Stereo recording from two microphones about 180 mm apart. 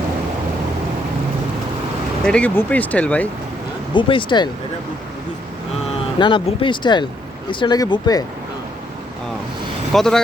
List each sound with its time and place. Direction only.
2.2 s speech: 5° left (ahead or behind)
3.9 s speech: 25° left (ahead or behind)
6.1 s speech: 25° left (ahead or behind)
9.9 s speech: centre (ahead or behind)